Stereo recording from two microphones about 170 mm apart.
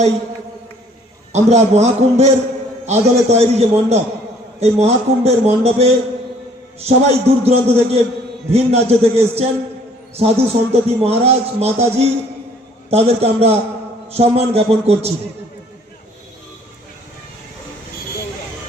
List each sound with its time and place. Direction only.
1.3 s a man's voice: 40° right (ahead or behind)